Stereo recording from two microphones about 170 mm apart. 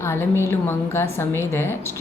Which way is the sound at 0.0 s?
15° left (ahead or behind).